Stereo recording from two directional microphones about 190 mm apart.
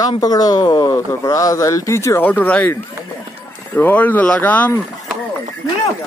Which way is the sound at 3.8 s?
10° left (ahead or behind).